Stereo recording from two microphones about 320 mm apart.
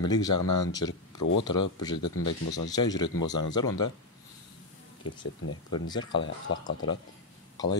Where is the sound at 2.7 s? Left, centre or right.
Centre.